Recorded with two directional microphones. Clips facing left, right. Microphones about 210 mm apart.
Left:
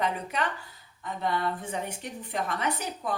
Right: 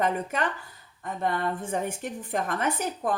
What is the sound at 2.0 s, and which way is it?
A woman's voice, 50° right (ahead or behind).